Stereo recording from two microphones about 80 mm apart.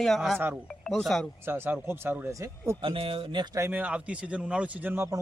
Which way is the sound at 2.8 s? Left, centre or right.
Right.